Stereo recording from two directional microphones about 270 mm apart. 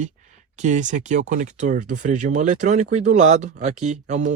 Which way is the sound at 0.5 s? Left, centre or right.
Right.